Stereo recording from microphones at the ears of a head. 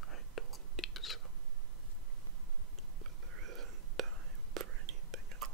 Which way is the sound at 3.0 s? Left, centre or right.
Right.